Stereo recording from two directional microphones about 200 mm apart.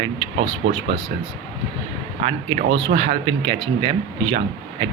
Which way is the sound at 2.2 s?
25° right (ahead or behind).